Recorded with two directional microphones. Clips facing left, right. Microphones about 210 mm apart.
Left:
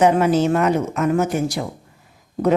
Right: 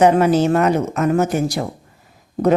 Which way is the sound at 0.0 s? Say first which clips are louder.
Right 2 dB; 35° right (ahead or behind).